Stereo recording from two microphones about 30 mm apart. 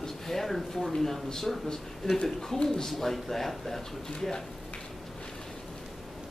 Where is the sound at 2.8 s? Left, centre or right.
Centre.